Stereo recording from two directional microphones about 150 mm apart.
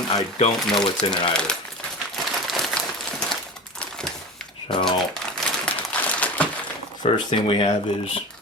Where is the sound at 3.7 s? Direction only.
5° left (ahead or behind).